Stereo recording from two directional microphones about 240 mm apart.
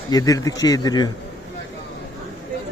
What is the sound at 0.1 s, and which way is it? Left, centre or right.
Speech, centre.